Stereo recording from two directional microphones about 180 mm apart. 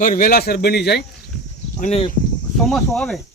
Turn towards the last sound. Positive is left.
turn(degrees=5)  # may be behind; listen again after turning